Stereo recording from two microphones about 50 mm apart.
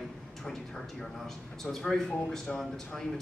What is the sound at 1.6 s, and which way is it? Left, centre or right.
Speech, centre.